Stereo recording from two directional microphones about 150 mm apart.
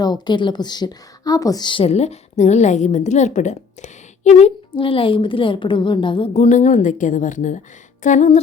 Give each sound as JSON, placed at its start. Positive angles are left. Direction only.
{"t": 0.0, "sound": "a woman's voice", "side_deg": 30}
{"t": 4.7, "sound": "a woman's voice", "side_deg": 35}
{"t": 6.3, "sound": "a woman's voice", "side_deg": 55}